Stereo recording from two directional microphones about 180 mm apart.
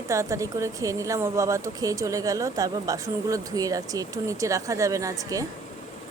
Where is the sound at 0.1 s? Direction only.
15° right (ahead or behind).